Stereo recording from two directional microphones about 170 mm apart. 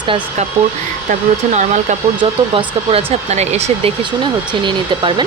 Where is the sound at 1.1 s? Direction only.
45° right (ahead or behind).